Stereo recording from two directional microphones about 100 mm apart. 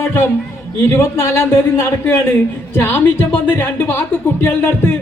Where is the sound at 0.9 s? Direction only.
30° left (ahead or behind).